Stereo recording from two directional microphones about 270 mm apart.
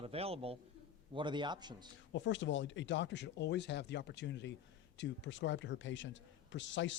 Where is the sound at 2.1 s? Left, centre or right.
Left.